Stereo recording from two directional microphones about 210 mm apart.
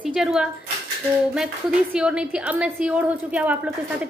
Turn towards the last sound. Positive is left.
turn(degrees=-5)  # may be behind; listen again after turning